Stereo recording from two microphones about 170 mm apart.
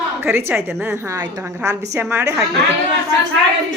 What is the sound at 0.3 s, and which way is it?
A woman's voice, 15° right (ahead or behind).